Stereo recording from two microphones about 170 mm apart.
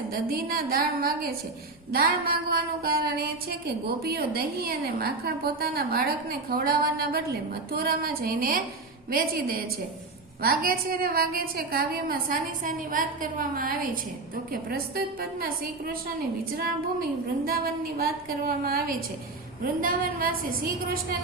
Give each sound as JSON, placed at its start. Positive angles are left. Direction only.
{"t": 0.1, "sound": "a woman's voice", "side_deg": -60}
{"t": 17.4, "sound": "a woman's voice", "side_deg": -60}